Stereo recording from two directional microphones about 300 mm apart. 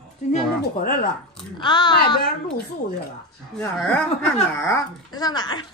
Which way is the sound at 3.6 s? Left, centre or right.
Centre.